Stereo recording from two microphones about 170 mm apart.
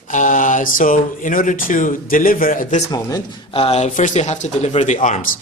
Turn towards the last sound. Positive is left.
turn(degrees=45)  # may be behind; listen again after turning